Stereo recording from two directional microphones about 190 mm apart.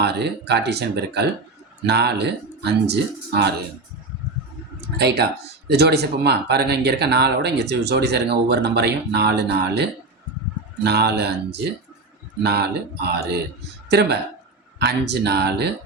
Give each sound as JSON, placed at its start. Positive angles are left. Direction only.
{"t": 0.0, "sound": "speech", "side_deg": -60}
{"t": 4.9, "sound": "speech", "side_deg": -60}
{"t": 10.8, "sound": "speech", "side_deg": -60}